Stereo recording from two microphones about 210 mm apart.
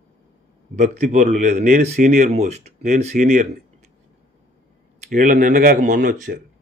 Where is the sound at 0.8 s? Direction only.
35° right (ahead or behind).